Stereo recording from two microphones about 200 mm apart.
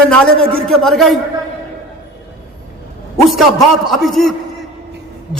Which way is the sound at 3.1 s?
Centre (ahead or behind).